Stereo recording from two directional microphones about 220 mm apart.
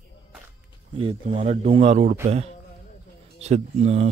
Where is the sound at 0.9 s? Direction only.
30° right (ahead or behind).